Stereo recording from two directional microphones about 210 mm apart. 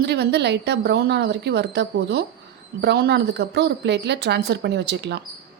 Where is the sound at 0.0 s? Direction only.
50° right (ahead or behind).